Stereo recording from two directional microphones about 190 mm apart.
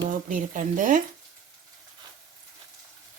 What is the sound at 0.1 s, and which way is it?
Speech, 45° right (ahead or behind).